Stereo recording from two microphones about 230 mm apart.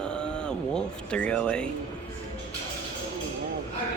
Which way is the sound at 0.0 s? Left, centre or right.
Centre.